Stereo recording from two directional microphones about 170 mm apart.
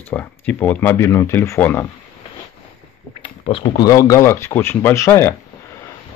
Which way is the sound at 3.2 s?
30° left (ahead or behind).